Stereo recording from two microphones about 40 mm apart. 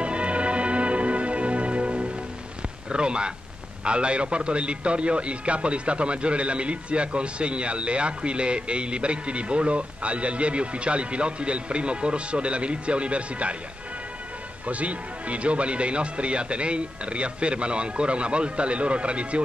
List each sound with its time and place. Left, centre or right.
0.0 s music: right
2.9 s speech: right
14.7 s speech: right